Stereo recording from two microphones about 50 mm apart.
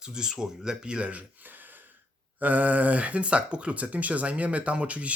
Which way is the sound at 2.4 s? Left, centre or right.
Right.